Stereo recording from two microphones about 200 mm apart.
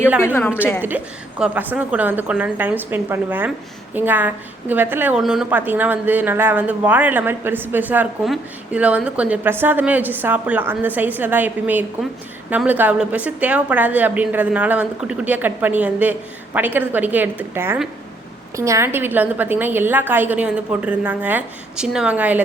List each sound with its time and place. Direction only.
0.3 s a woman's voice: 10° left (ahead or behind)
0.8 s a woman's voice: 10° right (ahead or behind)